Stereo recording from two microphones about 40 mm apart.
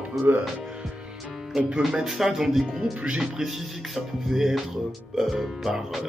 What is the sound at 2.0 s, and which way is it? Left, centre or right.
Speech, centre.